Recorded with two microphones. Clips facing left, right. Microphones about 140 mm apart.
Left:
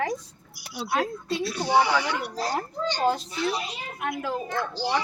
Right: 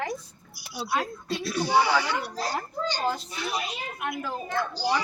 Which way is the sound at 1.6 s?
15° left (ahead or behind).